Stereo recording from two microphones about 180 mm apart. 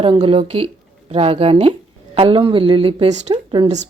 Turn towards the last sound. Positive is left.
turn(degrees=-25)  # may be behind; listen again after turning